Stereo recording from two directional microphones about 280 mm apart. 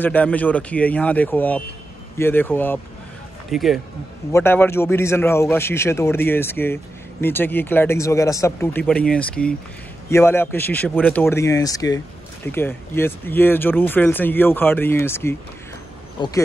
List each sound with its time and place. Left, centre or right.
0.0 s a man's voice: centre